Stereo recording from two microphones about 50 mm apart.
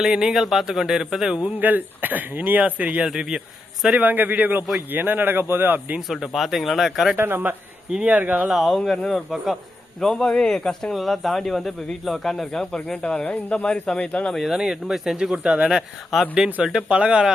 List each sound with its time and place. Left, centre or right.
0.0 s speech: centre
1.5 s speech: right
3.0 s speech: centre
3.9 s speech: right
6.0 s speech: centre
7.2 s speech: right
8.0 s speech: right
8.4 s speech: centre
10.9 s speech: centre
14.3 s speech: centre
16.1 s speech: centre
16.9 s speech: right